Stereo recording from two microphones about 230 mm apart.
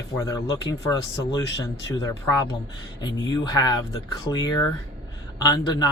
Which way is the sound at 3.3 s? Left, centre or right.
Centre.